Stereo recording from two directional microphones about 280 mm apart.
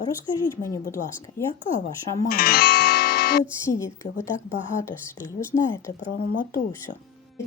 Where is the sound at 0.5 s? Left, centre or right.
Centre.